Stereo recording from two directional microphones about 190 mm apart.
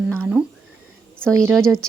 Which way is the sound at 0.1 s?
Centre (ahead or behind).